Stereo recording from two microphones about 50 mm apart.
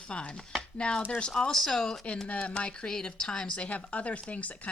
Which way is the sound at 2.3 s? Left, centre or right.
Left.